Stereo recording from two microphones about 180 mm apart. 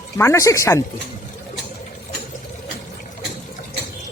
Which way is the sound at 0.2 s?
15° left (ahead or behind).